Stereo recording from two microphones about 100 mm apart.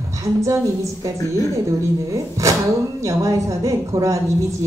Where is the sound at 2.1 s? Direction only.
35° right (ahead or behind).